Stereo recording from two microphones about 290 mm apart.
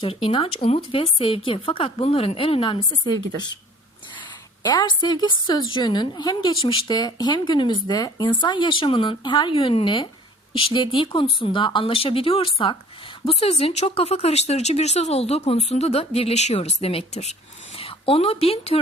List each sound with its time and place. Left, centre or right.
0.0 s a woman's voice: centre
4.6 s a woman's voice: centre